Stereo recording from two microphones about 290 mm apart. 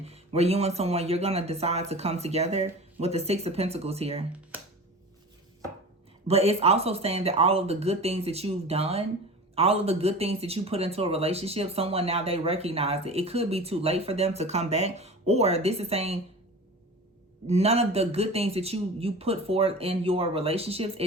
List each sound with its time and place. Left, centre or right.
0.0 s speech: right
6.2 s speech: right
17.4 s speech: right